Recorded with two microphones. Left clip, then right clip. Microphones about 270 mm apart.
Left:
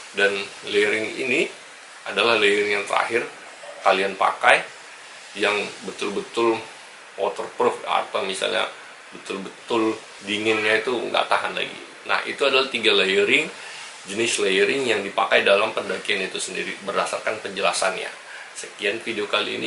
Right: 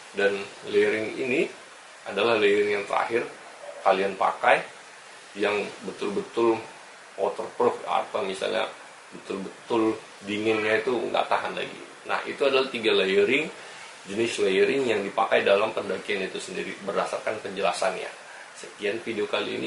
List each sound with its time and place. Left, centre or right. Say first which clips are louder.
0.1 s speech: left 4 dB; centre
2.0 s speech: left 3 dB; centre
7.2 s speech: left 2 dB; right
7.6 s speech: left 3 dB; centre
9.8 s speech: left 3 dB; centre
10.9 s speech: left 2 dB; right
11.1 s a man's voice: left 6 dB; centre